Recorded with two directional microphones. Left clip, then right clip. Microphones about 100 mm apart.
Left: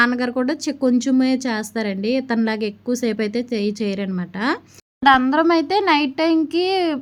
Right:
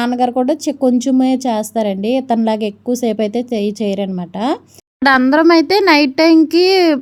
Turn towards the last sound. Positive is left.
turn(degrees=-55)  # may be behind; listen again after turning